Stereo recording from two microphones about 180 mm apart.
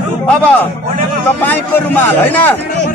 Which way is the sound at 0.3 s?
5° left (ahead or behind).